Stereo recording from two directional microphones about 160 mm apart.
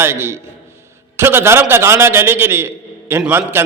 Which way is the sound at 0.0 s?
15° right (ahead or behind).